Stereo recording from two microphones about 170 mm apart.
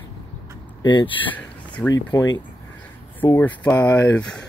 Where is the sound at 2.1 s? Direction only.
25° left (ahead or behind).